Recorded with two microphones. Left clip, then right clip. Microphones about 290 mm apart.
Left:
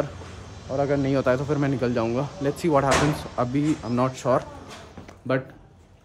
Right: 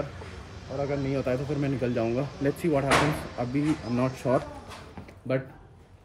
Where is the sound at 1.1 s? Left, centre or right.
Centre.